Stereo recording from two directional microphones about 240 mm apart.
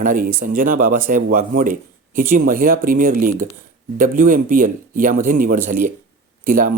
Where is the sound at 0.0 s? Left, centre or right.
Right.